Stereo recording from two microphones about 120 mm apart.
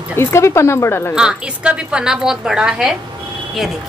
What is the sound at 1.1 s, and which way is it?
A woman's voice, 10° right (ahead or behind).